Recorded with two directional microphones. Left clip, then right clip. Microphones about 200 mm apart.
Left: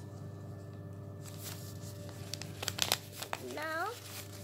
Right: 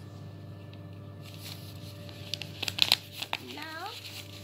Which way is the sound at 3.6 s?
60° left (ahead or behind).